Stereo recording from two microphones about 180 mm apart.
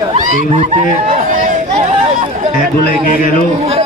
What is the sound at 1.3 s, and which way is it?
Chatter, 45° right (ahead or behind).